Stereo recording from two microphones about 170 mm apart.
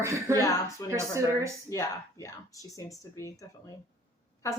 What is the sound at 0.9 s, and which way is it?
Speech, 15° right (ahead or behind).